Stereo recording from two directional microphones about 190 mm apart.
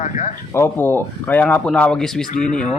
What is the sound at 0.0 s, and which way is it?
Speech, 40° left (ahead or behind).